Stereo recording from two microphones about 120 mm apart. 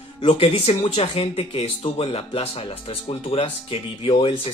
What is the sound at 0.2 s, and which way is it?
Speech, 50° left (ahead or behind).